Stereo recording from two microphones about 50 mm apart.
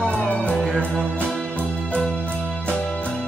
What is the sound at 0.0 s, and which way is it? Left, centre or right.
Music, centre.